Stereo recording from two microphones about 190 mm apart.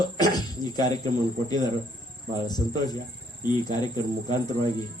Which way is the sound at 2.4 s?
20° left (ahead or behind).